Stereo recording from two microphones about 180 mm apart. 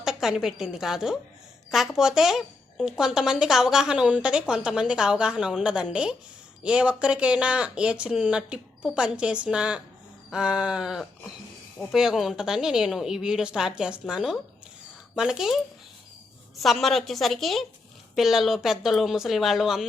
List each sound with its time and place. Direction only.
0.0 s a woman's voice: 5° right (ahead or behind)
16.6 s a woman's voice: centre (ahead or behind)